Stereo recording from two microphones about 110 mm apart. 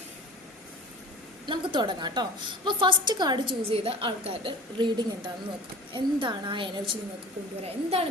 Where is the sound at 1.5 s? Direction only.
45° right (ahead or behind).